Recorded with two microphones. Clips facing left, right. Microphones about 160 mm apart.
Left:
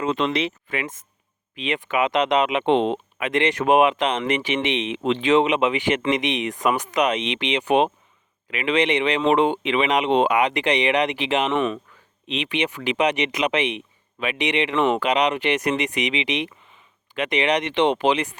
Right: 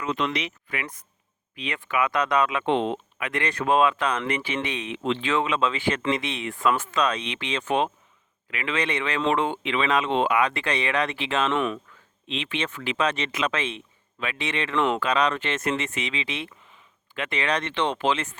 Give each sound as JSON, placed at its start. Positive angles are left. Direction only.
{"t": 0.0, "sound": "speech", "side_deg": 25}